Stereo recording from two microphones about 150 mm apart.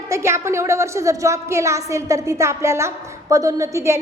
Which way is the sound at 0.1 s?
20° right (ahead or behind).